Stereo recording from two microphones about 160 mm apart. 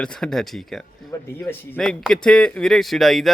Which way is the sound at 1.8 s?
5° left (ahead or behind).